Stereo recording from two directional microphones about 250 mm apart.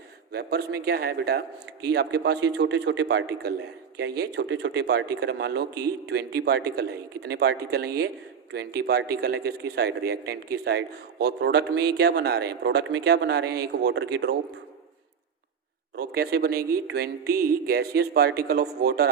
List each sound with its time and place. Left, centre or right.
0.3 s a man's voice: right
16.0 s a man's voice: right